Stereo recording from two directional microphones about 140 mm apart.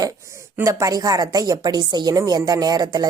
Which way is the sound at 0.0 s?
20° right (ahead or behind).